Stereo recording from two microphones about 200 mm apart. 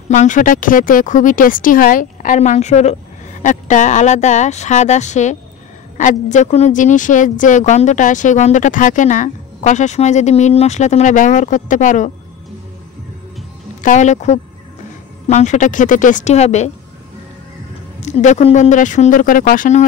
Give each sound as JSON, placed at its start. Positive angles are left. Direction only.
{"t": 0.1, "sound": "a woman's voice", "side_deg": 40}
{"t": 13.7, "sound": "a woman's voice", "side_deg": 40}
{"t": 18.0, "sound": "a woman's voice", "side_deg": 35}